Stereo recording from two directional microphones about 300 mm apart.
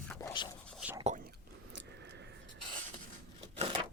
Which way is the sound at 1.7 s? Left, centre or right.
Right.